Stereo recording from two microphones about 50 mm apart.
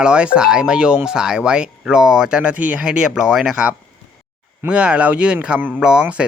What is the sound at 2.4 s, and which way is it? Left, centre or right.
Speech, right.